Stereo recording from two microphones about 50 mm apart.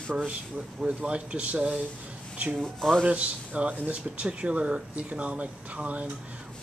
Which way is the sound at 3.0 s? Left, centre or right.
Right.